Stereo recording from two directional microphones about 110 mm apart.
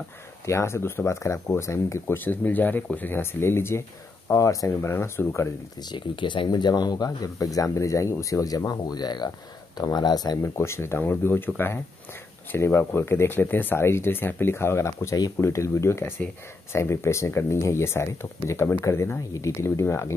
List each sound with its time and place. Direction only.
0.5 s speech: 25° left (ahead or behind)
5.8 s speech: 45° left (ahead or behind)
10.4 s speech: 25° left (ahead or behind)